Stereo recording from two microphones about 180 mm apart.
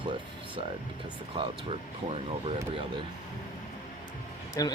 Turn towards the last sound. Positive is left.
turn(degrees=20)  # may be behind; listen again after turning